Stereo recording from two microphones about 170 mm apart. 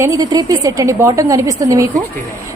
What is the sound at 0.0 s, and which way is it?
A woman's voice, 20° right (ahead or behind).